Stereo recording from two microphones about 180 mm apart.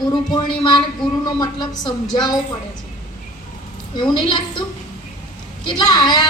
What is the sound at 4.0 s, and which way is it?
Speech, 25° left (ahead or behind).